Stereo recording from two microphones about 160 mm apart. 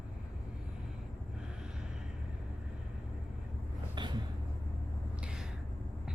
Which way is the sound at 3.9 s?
30° right (ahead or behind).